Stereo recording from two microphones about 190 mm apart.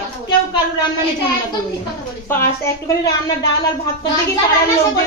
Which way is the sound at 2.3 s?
15° left (ahead or behind).